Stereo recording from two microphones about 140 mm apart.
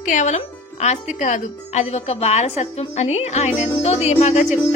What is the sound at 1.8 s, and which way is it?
A woman's voice, 45° left (ahead or behind).